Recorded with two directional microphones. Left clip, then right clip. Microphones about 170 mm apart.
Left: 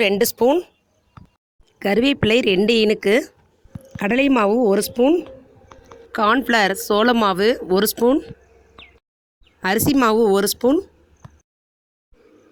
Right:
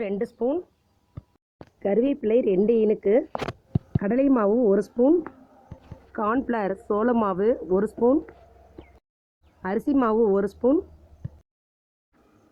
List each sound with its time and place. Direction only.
0.2 s speech: 40° left (ahead or behind)
1.8 s a woman's voice: 60° left (ahead or behind)
3.9 s speech: 55° left (ahead or behind)
6.1 s speech: 50° left (ahead or behind)
7.9 s speech: 40° left (ahead or behind)
9.6 s speech: 60° left (ahead or behind)